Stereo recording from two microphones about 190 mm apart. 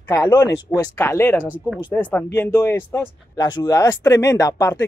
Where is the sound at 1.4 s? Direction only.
10° right (ahead or behind).